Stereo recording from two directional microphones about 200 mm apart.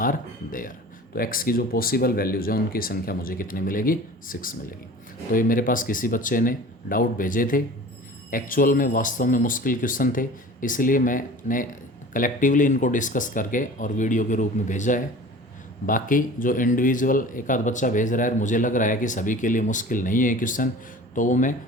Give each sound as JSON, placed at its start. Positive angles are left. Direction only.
{"t": 0.0, "sound": "speech", "side_deg": 45}